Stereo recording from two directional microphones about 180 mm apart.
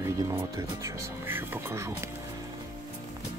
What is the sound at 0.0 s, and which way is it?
Speech, 15° right (ahead or behind).